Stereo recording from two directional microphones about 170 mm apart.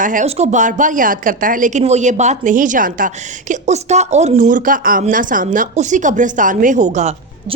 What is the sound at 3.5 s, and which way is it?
A woman's voice, 40° right (ahead or behind).